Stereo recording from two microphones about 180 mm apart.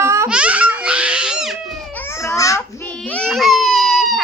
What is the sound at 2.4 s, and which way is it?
Speech, 15° left (ahead or behind).